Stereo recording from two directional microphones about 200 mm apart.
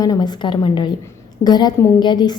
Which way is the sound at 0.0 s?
20° left (ahead or behind).